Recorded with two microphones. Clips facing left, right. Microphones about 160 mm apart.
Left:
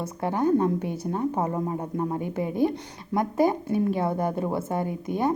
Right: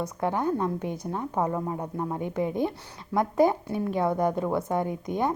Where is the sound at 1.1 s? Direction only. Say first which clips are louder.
Left 2 dB; 25° left (ahead or behind).